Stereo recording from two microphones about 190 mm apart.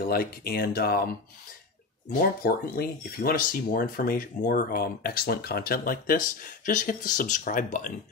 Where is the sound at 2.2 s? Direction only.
50° left (ahead or behind).